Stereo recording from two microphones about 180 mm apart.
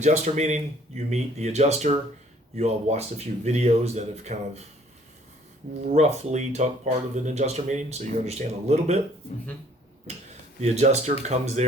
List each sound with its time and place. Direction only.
0.0 s speech: 40° right (ahead or behind)
5.9 s speech: 40° right (ahead or behind)
10.1 s speech: 35° right (ahead or behind)